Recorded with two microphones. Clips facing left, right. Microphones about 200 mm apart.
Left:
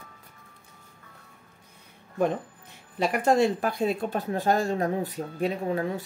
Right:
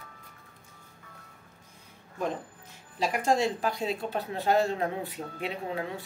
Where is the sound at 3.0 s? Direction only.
60° left (ahead or behind).